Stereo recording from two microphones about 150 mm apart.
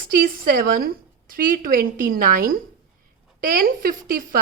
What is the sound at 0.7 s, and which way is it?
A woman's voice, 80° right.